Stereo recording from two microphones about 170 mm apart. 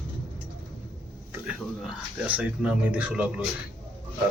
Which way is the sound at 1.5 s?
5° right (ahead or behind).